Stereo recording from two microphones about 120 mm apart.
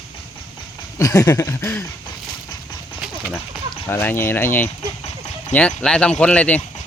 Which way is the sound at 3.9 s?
15° left (ahead or behind).